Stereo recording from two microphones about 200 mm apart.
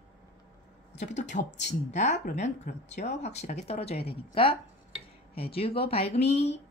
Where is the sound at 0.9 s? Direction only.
35° left (ahead or behind).